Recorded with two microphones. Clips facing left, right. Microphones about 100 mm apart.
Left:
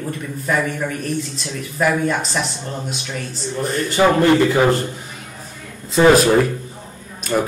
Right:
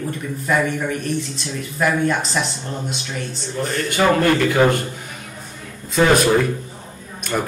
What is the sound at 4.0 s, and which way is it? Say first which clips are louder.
Speech: left 3 dB; 20° left (ahead or behind).